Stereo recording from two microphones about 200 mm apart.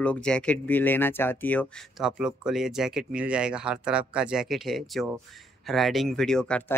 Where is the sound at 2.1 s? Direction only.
5° right (ahead or behind).